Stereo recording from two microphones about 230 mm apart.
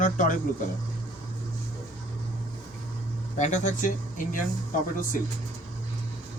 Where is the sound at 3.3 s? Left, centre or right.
Left.